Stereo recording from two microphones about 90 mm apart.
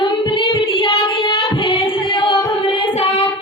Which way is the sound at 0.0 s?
65° left (ahead or behind).